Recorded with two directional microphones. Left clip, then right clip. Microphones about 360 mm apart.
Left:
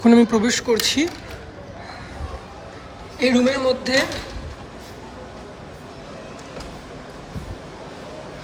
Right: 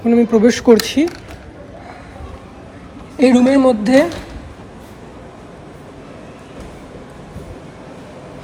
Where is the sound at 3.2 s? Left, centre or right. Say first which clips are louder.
Right 7 dB; centre.